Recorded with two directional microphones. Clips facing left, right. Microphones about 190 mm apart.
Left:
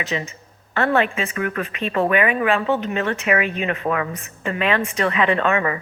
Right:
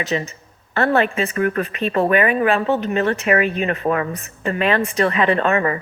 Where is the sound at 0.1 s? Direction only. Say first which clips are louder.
Right 3 dB; 40° right (ahead or behind).